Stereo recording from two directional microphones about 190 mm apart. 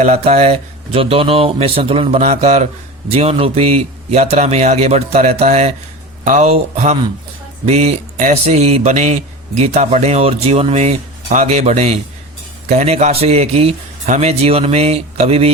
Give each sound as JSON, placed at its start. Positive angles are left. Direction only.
{"t": 0.0, "sound": "speech", "side_deg": -35}